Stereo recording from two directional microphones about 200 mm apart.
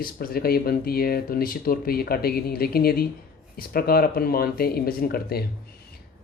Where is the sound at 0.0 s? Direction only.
45° left (ahead or behind).